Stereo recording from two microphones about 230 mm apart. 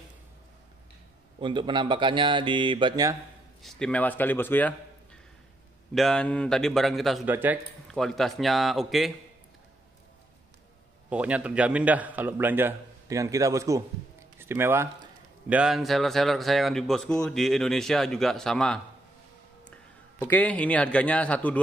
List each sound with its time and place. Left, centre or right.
1.4 s speech: right
3.6 s a man's voice: centre
11.1 s a man's voice: centre